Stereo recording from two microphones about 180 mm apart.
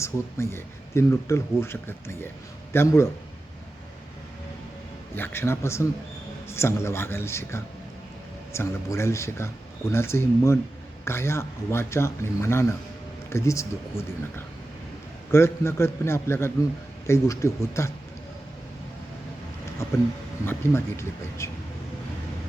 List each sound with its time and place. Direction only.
0.0 s speech: 15° left (ahead or behind)
5.1 s speech: 10° left (ahead or behind)
19.8 s a sound: 15° left (ahead or behind)
20.4 s speech: 15° left (ahead or behind)